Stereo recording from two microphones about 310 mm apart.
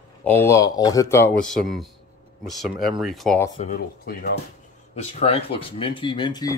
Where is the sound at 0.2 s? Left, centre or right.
Centre.